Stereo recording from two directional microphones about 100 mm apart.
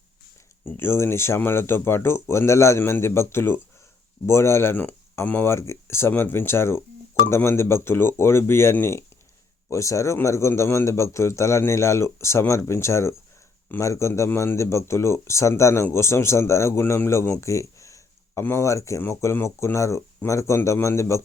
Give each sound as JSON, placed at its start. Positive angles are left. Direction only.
{"t": 0.6, "sound": "speech", "side_deg": 25}